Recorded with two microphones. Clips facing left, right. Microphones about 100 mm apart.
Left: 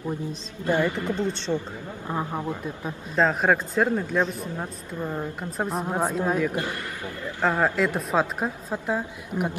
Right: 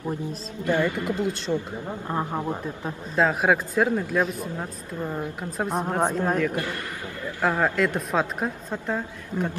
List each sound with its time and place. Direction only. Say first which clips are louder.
0.7 s speech: even; 25° left (ahead or behind)
1.2 s speech: right 1 dB; 5° right (ahead or behind)
3.2 s speech: even; 5° right (ahead or behind)
7.5 s speech: even; centre (ahead or behind)